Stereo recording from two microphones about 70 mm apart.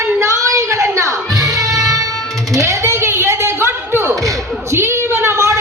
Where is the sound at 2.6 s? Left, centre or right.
Right.